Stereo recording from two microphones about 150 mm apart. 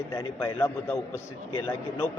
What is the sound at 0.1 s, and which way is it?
A man's voice, 15° left (ahead or behind).